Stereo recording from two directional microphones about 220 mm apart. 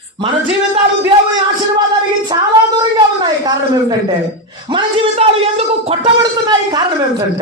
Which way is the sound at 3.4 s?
15° right (ahead or behind).